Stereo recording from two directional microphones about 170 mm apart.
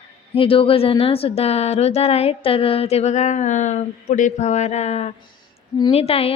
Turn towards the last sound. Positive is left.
turn(degrees=35)  # may be behind; listen again after turning